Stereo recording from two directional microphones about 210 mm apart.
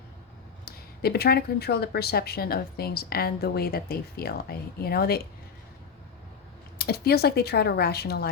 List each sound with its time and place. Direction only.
0.6 s speech: 50° left (ahead or behind)
6.7 s speech: 50° left (ahead or behind)